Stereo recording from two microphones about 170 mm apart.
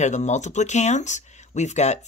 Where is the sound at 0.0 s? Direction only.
45° left (ahead or behind).